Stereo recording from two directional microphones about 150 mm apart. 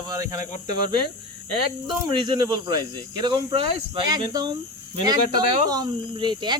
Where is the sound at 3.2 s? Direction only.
30° right (ahead or behind).